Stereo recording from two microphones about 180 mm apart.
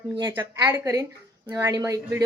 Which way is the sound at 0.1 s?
25° right (ahead or behind).